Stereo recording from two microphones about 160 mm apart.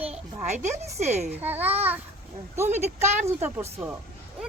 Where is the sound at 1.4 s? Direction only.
10° right (ahead or behind).